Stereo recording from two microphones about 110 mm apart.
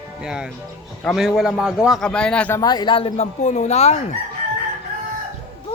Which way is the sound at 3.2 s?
90° left.